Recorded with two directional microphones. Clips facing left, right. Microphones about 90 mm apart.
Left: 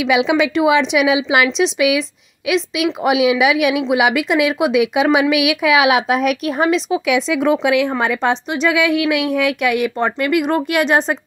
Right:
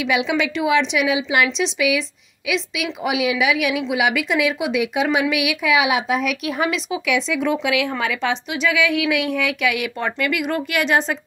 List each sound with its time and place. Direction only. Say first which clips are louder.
0.0 s a woman's voice: left 5 dB; 70° left (ahead or behind)
1.6 s a woman's voice: left 5 dB; 65° left (ahead or behind)
6.4 s speech: left 6 dB; 35° left (ahead or behind)
7.1 s a woman's voice: left 4 dB; 55° left (ahead or behind)
8.0 s speech: left 5 dB; 40° left (ahead or behind)
8.6 s speech: left 4 dB; 55° left (ahead or behind); by 11.1 s 40° left (ahead or behind)